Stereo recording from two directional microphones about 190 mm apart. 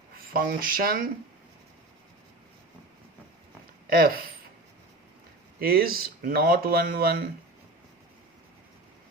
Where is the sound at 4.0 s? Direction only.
50° right (ahead or behind).